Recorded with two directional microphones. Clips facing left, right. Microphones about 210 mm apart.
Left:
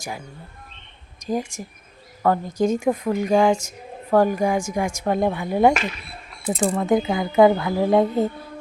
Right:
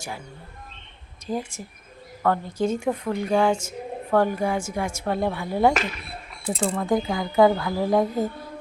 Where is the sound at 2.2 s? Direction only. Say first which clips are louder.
Left 3 dB; 10° left (ahead or behind).